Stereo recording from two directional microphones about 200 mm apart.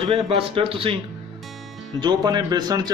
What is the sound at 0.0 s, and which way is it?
Speech, 30° right (ahead or behind).